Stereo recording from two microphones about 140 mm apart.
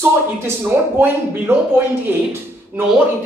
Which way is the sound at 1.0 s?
15° right (ahead or behind).